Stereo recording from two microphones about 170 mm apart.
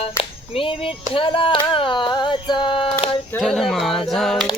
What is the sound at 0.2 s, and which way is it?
Speech, 35° left (ahead or behind).